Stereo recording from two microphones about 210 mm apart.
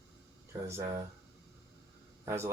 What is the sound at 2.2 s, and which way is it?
Speech, 10° right (ahead or behind).